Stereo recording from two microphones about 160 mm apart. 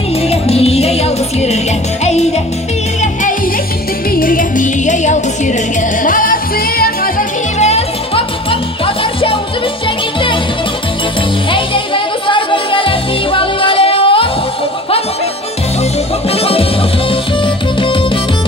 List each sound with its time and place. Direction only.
0.3 s music: 40° left (ahead or behind)
4.1 s music: 60° left (ahead or behind)
7.6 s music: 40° left (ahead or behind)
11.5 s music: 30° left (ahead or behind)
16.3 s music: 35° left (ahead or behind)